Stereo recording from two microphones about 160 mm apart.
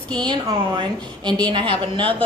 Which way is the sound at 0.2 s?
30° right (ahead or behind).